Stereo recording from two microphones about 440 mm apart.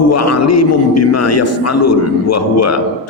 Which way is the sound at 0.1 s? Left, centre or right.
Left.